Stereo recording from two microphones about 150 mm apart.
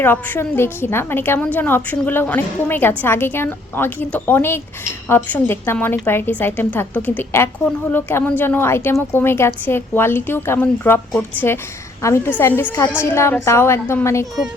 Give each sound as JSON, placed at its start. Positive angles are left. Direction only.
{"t": 0.0, "sound": "a woman's voice", "side_deg": 15}